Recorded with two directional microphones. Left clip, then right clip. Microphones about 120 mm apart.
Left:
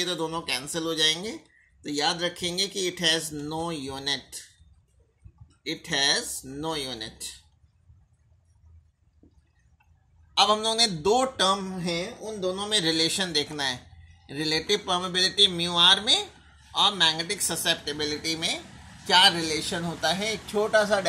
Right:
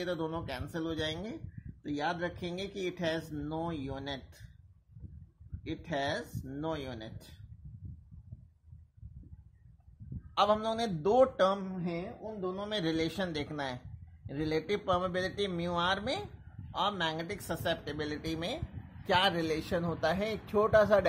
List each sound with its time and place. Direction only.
0.0 s speech: 35° right (ahead or behind)
5.9 s speech: 30° right (ahead or behind)
10.3 s a man's voice: 40° right (ahead or behind)